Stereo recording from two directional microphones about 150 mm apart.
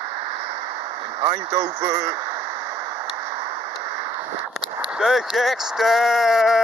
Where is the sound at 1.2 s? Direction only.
35° right (ahead or behind).